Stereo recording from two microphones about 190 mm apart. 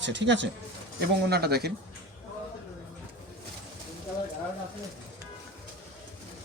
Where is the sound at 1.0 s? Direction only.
60° right (ahead or behind).